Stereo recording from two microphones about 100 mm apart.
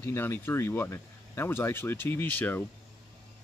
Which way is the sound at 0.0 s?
25° left (ahead or behind).